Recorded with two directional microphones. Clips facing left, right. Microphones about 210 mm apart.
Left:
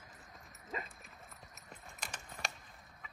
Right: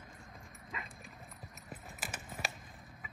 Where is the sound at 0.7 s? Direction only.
40° left (ahead or behind).